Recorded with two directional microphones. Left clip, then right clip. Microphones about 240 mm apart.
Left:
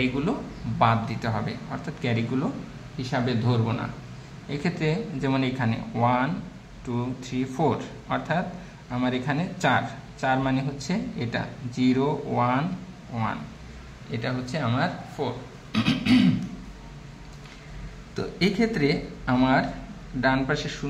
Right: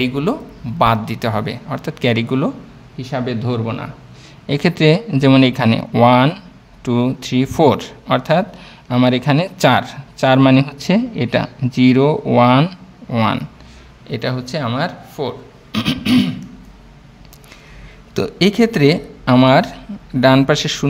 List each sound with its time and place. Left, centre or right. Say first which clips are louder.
0.7 s speech: right 8 dB; right
18.1 s speech: right 10 dB; right